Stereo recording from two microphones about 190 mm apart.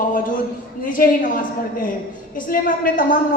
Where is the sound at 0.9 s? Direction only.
45° left (ahead or behind).